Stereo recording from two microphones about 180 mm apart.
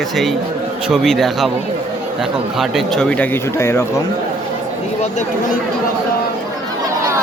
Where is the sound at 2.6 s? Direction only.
Centre (ahead or behind).